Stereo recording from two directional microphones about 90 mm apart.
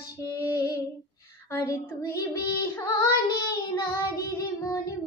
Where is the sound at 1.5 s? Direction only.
30° left (ahead or behind).